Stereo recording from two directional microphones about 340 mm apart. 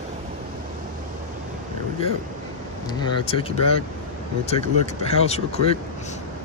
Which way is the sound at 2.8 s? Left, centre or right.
Centre.